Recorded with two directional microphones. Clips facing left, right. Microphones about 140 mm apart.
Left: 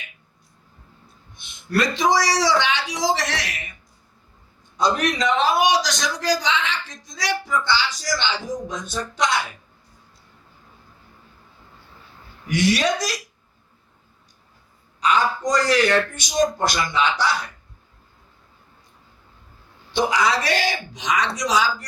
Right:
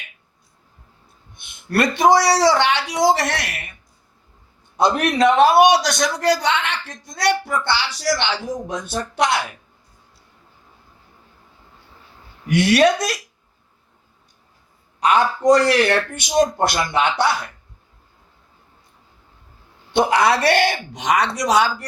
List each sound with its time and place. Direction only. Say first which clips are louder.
1.4 s a man's voice: right 3 dB; 60° right (ahead or behind)
4.8 s a man's voice: right 5 dB; 60° right (ahead or behind)
12.5 s a man's voice: right 5 dB; 60° right (ahead or behind)
15.0 s a man's voice: right 5 dB; 60° right (ahead or behind)
19.9 s a man's voice: right 4 dB; 60° right (ahead or behind)